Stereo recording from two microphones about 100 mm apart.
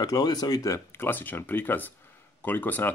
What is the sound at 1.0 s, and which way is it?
Speech, 20° left (ahead or behind).